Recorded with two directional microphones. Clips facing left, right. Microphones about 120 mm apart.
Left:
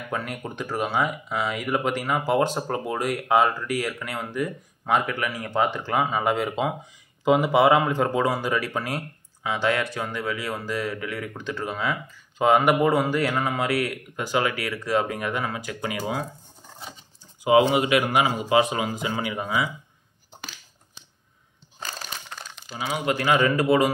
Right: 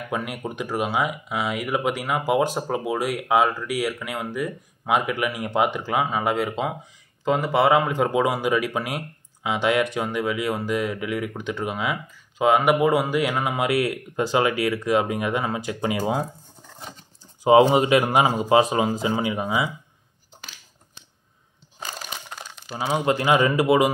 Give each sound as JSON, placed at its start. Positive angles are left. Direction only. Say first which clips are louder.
{"t": 0.1, "sound": "speech", "louder": "right 2 dB", "side_deg": -10}
{"t": 17.4, "sound": "speech", "louder": "right 3 dB", "side_deg": -30}
{"t": 21.7, "sound": "a sound", "louder": "right 1 dB", "side_deg": -10}
{"t": 22.8, "sound": "a man's voice", "louder": "right 3 dB", "side_deg": -30}